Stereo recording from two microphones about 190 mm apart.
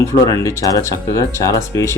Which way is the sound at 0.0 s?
15° left (ahead or behind).